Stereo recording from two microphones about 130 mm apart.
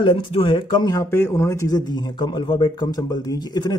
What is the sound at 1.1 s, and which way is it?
Speech, 20° left (ahead or behind).